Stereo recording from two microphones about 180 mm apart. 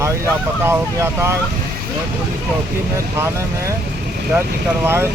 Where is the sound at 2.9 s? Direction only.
15° right (ahead or behind).